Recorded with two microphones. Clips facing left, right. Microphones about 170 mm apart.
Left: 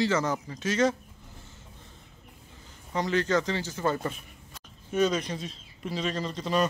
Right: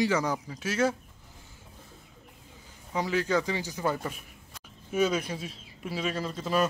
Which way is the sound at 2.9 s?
5° right (ahead or behind).